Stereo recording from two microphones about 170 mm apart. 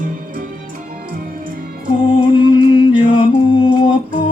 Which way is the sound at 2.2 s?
25° left (ahead or behind).